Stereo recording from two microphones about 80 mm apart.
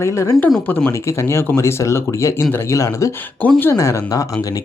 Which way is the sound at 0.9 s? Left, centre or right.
Left.